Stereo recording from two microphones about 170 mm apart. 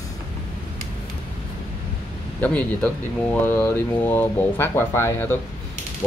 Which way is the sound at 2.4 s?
10° left (ahead or behind).